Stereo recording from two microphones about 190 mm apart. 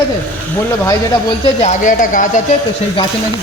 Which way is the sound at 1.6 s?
45° left (ahead or behind).